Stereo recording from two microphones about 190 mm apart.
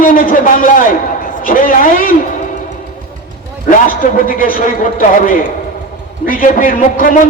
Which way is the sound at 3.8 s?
45° left (ahead or behind).